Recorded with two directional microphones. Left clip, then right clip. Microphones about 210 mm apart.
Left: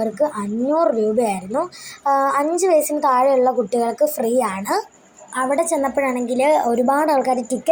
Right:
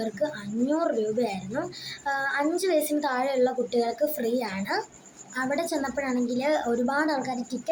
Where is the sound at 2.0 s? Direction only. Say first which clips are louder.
Left 10 dB; 20° left (ahead or behind).